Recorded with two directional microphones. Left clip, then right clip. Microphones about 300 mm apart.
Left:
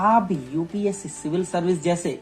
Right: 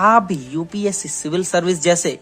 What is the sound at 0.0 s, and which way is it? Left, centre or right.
Speech, right.